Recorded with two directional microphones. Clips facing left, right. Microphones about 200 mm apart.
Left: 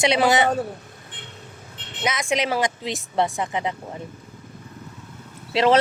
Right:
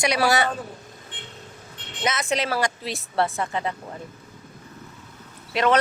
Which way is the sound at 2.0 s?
15° left (ahead or behind).